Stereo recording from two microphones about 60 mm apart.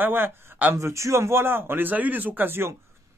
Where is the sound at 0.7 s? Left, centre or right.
Right.